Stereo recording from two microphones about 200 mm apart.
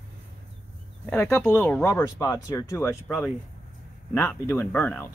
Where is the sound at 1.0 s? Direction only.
10° left (ahead or behind).